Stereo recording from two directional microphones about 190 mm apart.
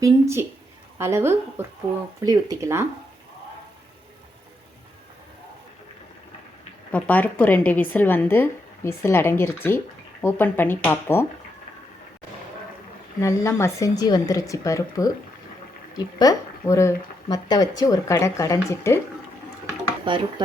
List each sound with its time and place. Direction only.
0.0 s a woman's voice: 15° right (ahead or behind)
6.9 s speech: 10° left (ahead or behind)
13.2 s speech: 15° left (ahead or behind)
20.1 s speech: 25° right (ahead or behind)